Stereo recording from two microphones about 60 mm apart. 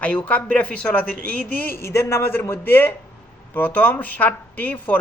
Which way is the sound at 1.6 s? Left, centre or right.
Left.